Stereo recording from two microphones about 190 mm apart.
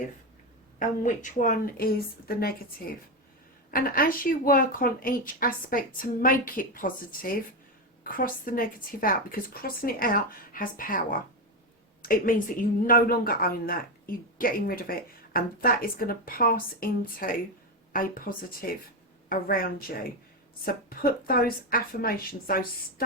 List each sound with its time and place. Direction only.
0.8 s speech: 45° left (ahead or behind)